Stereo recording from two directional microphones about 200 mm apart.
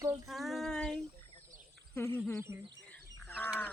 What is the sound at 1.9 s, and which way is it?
Speech, 10° left (ahead or behind).